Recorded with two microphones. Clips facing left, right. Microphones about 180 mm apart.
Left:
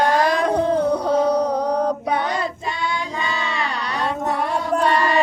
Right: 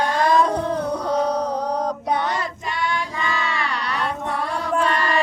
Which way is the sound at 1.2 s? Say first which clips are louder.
Left 4 dB; 10° left (ahead or behind).